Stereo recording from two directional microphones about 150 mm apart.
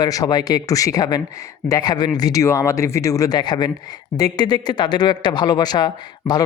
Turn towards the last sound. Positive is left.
turn(degrees=25)  # may be behind; listen again after turning